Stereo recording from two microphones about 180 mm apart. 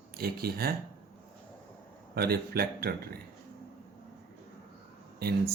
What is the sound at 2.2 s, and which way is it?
Speech, 60° right (ahead or behind).